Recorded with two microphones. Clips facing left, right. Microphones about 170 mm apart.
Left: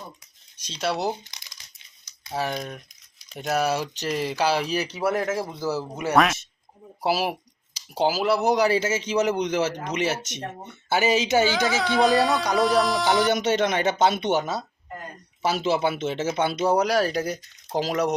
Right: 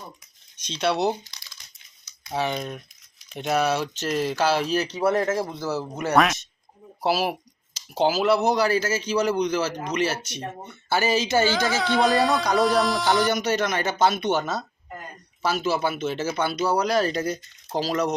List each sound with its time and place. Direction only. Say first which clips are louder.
0.6 s speech: right 3 dB; 5° left (ahead or behind)
2.3 s music: right 2 dB; centre (ahead or behind)
3.5 s speech: right 1 dB; 10° left (ahead or behind)
6.0 s music: even; 5° left (ahead or behind)
7.0 s speech: right 1 dB; 15° left (ahead or behind)
8.7 s speech: even; 25° left (ahead or behind)
11.5 s music: even; centre (ahead or behind)
13.1 s speech: left 1 dB; 25° left (ahead or behind)
16.9 s speech: even; 10° left (ahead or behind)